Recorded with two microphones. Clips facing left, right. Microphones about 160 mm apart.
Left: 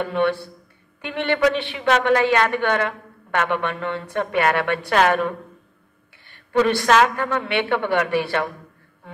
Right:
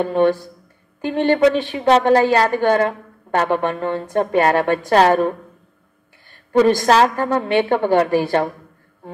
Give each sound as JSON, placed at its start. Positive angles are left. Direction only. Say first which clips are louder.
{"t": 0.0, "sound": "a woman's voice", "louder": "right 5 dB", "side_deg": -35}